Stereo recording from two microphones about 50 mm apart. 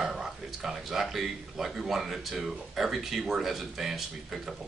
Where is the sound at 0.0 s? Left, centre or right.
Centre.